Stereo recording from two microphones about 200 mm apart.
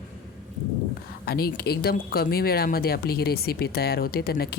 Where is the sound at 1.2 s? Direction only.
50° left (ahead or behind).